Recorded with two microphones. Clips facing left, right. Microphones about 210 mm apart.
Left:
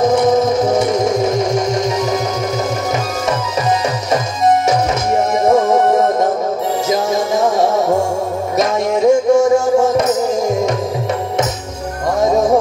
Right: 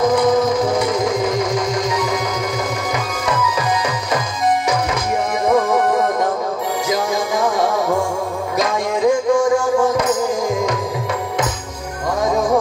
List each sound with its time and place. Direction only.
0.0 s a sound: 25° left (ahead or behind)
4.6 s music: 25° left (ahead or behind)
12.2 s music: 25° left (ahead or behind)